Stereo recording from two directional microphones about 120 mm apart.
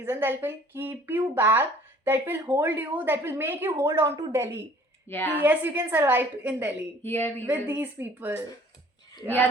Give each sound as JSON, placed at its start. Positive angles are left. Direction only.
{"t": 0.0, "sound": "speech", "side_deg": -20}
{"t": 5.0, "sound": "speech", "side_deg": 15}
{"t": 5.4, "sound": "speech", "side_deg": -15}
{"t": 7.0, "sound": "speech", "side_deg": 20}
{"t": 7.8, "sound": "speech", "side_deg": -15}